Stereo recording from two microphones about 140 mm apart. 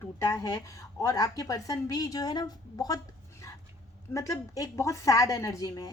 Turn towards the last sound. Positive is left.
turn(degrees=25)  # may be behind; listen again after turning